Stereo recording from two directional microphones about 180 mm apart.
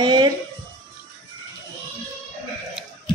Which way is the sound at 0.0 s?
25° right (ahead or behind).